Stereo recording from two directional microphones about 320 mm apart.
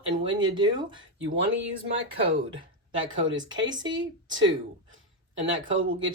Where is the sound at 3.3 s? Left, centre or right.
Centre.